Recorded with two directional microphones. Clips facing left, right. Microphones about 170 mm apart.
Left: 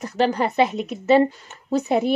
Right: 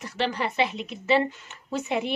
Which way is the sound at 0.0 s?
45° left (ahead or behind).